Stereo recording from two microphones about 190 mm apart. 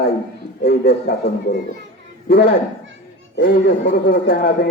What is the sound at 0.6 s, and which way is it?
Speech, 55° left (ahead or behind).